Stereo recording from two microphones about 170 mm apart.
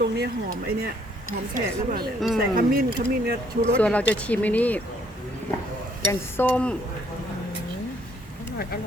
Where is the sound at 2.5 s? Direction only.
60° right (ahead or behind).